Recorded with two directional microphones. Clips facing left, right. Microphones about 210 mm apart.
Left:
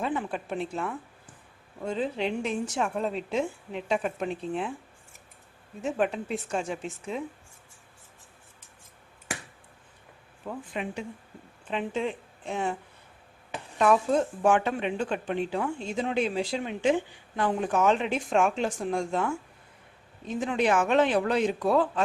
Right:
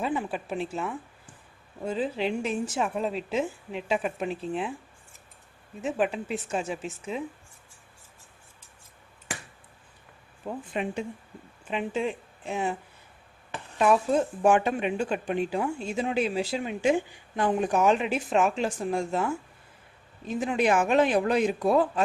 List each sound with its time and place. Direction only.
0.0 s a woman's voice: 10° right (ahead or behind)
5.8 s a woman's voice: centre (ahead or behind)
10.5 s speech: 20° right (ahead or behind)
11.7 s speech: 10° right (ahead or behind)
13.7 s speech: 5° right (ahead or behind)